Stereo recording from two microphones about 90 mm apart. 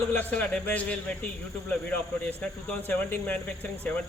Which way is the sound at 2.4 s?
15° left (ahead or behind).